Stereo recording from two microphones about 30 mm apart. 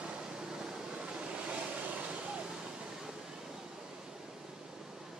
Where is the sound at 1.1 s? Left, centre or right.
Right.